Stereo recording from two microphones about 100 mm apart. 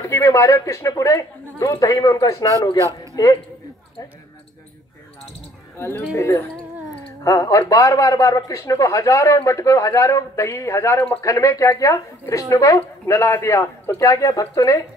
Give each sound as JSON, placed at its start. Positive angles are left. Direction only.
{"t": 0.0, "sound": "a man's voice", "side_deg": 30}
{"t": 5.8, "sound": "a woman's voice", "side_deg": 25}
{"t": 7.2, "sound": "a man's voice", "side_deg": 35}